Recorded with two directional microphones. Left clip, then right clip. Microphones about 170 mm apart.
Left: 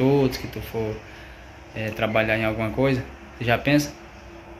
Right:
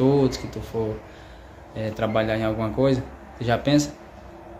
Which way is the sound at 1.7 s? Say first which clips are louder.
Left 1 dB; 10° right (ahead or behind).